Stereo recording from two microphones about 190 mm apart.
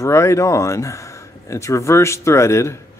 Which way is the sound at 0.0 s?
15° left (ahead or behind).